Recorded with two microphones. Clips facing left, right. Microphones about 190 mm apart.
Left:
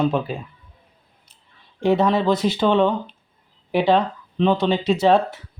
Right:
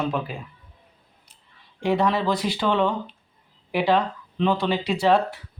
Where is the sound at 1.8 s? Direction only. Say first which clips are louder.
Left 4 dB; 25° left (ahead or behind).